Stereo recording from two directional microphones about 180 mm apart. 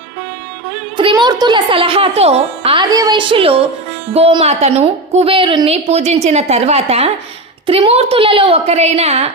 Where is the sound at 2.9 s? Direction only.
20° right (ahead or behind).